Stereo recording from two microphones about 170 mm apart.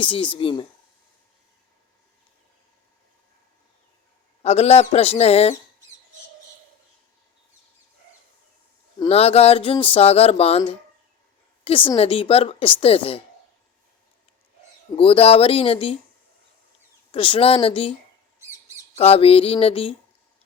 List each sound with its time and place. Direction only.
0.0 s speech: 30° left (ahead or behind)
4.4 s speech: 40° left (ahead or behind)
9.0 s speech: 35° left (ahead or behind)
14.9 s speech: 35° left (ahead or behind)
17.1 s speech: 30° left (ahead or behind)
18.9 s speech: 35° left (ahead or behind)